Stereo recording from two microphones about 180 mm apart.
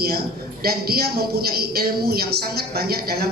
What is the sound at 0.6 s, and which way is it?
Speech, 60° right (ahead or behind).